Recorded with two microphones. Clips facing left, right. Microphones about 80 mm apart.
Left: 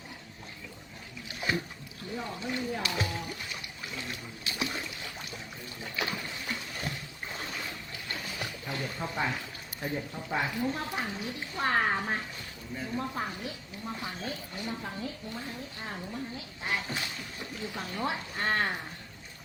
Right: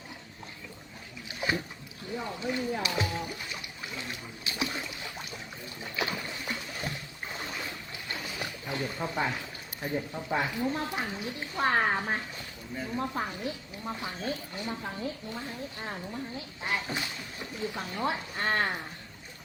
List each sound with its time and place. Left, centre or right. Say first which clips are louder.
1.4 s boat: right 1 dB; centre
9.8 s speech: right 2 dB; centre
16.6 s speech: right 1 dB; centre